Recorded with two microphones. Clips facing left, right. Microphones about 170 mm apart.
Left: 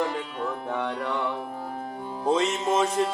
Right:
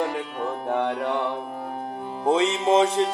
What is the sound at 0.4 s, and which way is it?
Music, 30° right (ahead or behind).